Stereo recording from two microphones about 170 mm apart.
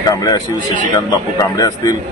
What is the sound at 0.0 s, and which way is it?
A man's voice, 20° left (ahead or behind).